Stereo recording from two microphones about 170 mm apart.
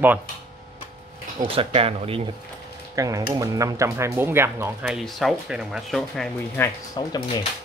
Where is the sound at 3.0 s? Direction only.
20° right (ahead or behind).